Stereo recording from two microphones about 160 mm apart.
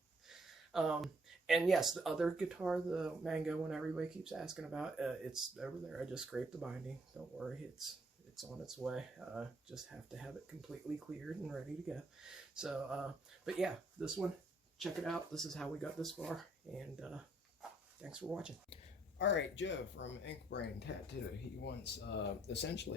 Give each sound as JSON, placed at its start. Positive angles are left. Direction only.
{"t": 0.3, "sound": "speech", "side_deg": -5}
{"t": 19.2, "sound": "speech", "side_deg": 90}